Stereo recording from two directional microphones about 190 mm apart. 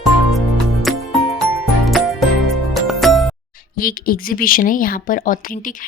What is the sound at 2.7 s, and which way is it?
Music, centre (ahead or behind).